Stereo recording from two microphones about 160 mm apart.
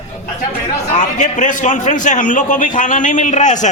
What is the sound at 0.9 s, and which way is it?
A man's voice, 50° left (ahead or behind).